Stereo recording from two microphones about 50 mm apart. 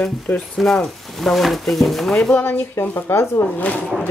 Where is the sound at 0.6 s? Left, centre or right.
Centre.